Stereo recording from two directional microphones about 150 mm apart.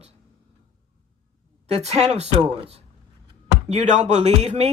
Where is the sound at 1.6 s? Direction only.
45° right (ahead or behind).